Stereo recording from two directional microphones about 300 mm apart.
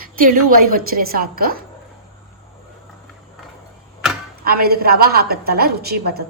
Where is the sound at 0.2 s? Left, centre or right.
Right.